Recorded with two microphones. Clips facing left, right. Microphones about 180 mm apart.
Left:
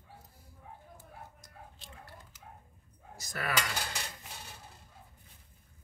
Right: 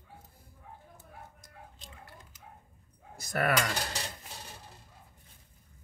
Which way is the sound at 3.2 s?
55° right (ahead or behind).